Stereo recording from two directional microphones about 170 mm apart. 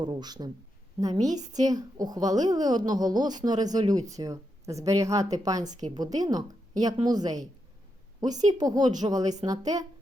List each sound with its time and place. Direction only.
0.0 s a woman's voice: 25° right (ahead or behind)
8.5 s a woman's voice: 20° right (ahead or behind)